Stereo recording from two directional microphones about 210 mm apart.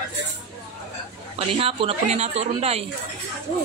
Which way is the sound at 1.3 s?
25° right (ahead or behind).